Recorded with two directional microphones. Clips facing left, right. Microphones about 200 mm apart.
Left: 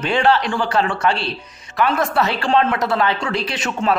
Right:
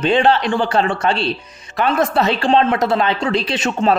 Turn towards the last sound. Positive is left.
turn(degrees=-25)  # may be behind; listen again after turning